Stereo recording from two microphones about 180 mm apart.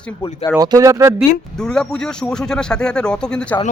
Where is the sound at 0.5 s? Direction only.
20° right (ahead or behind).